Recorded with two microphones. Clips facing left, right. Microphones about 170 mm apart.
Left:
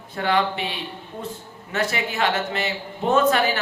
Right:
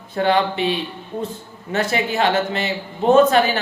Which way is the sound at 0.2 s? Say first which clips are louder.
Right 4 dB; 25° right (ahead or behind).